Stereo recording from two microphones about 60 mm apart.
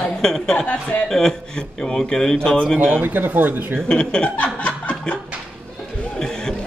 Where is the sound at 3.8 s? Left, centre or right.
Centre.